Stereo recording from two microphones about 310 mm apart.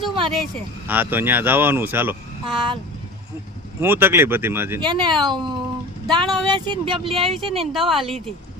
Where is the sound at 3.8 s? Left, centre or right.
Centre.